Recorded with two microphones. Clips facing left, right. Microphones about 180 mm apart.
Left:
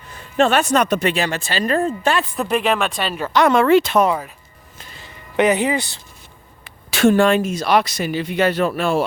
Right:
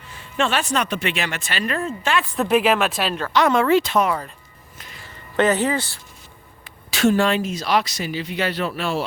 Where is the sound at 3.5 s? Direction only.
65° left (ahead or behind).